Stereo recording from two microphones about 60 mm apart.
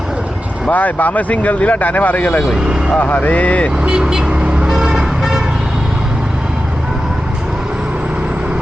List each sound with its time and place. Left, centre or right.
0.7 s speech: left
3.8 s vehicle: centre